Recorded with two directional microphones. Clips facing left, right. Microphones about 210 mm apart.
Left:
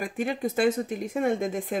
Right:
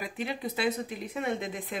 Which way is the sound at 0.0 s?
50° left (ahead or behind).